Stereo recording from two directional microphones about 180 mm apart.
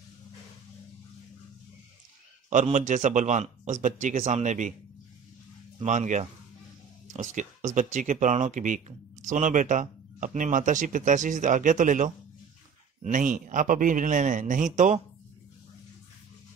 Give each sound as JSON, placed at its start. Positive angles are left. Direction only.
{"t": 2.5, "sound": "speech", "side_deg": -45}
{"t": 5.9, "sound": "speech", "side_deg": -45}